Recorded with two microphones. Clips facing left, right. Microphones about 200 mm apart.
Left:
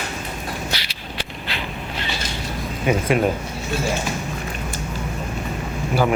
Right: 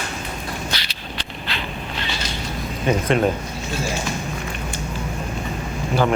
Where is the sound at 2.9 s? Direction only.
10° left (ahead or behind).